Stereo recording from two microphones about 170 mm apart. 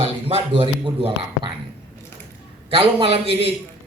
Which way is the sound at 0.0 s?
35° right (ahead or behind).